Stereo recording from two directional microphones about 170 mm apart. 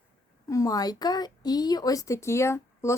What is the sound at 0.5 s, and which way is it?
A woman's voice, 20° left (ahead or behind).